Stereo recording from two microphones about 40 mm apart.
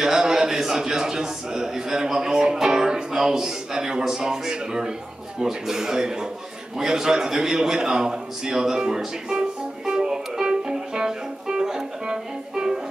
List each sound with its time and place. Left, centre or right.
0.0 s a man's voice: centre
9.8 s music: centre